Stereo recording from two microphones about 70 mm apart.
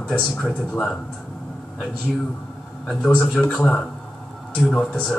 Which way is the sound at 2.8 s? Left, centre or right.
Centre.